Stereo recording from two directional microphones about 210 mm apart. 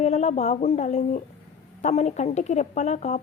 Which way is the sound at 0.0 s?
30° left (ahead or behind).